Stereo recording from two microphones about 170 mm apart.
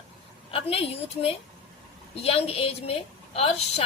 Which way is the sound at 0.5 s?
35° left (ahead or behind).